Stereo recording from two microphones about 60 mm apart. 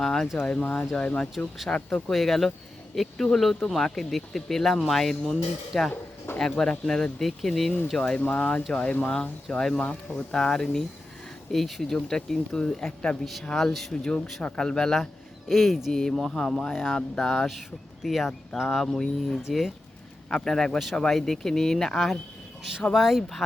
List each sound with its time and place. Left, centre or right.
0.0 s speech: centre
0.3 s speech: left
1.7 s speech: centre
8.2 s speech: left
9.5 s speech: centre
9.8 s speech: left
10.3 s speech: centre
15.4 s speech: centre
19.4 s speech: centre
20.3 s speech: centre